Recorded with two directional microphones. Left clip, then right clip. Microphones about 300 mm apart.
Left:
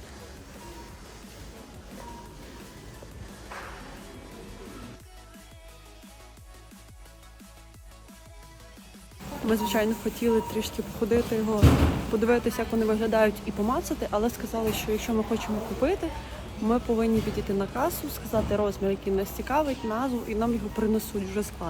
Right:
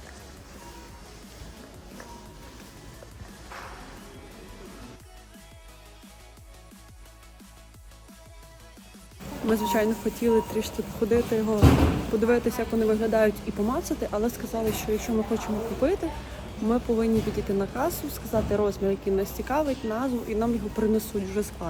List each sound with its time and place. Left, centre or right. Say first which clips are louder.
9.4 s speech: right 1 dB; centre